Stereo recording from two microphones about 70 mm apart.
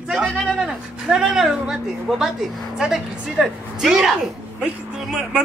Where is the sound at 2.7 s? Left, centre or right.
Centre.